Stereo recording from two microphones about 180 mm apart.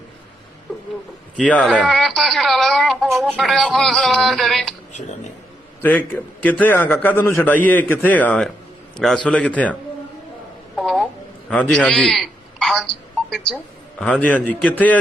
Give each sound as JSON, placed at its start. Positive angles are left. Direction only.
{"t": 0.7, "sound": "a sound", "side_deg": 0}
{"t": 1.4, "sound": "speech", "side_deg": 5}
{"t": 5.8, "sound": "a man's voice", "side_deg": 10}
{"t": 10.8, "sound": "a sound", "side_deg": 0}
{"t": 11.4, "sound": "a man's voice", "side_deg": 5}
{"t": 14.0, "sound": "a man's voice", "side_deg": 5}